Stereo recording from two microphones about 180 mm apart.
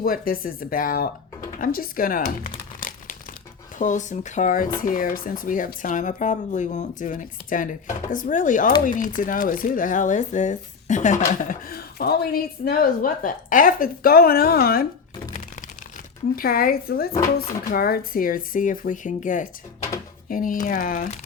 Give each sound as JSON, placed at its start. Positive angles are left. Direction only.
{"t": 0.0, "sound": "speech", "side_deg": 55}
{"t": 3.8, "sound": "speech", "side_deg": 45}
{"t": 11.4, "sound": "speech", "side_deg": 55}
{"t": 16.3, "sound": "speech", "side_deg": 55}